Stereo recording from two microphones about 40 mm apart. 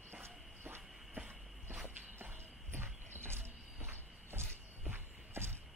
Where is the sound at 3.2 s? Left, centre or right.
Right.